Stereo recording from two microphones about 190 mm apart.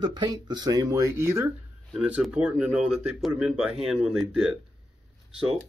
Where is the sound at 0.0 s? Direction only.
20° right (ahead or behind); by 4.6 s 5° right (ahead or behind).